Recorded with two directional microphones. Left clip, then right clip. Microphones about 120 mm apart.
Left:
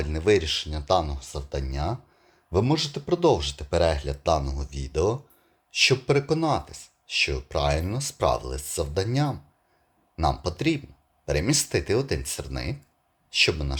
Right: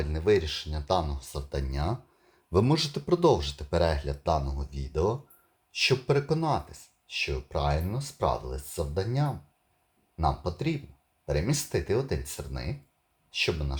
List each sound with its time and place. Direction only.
0.0 s speech: 35° left (ahead or behind)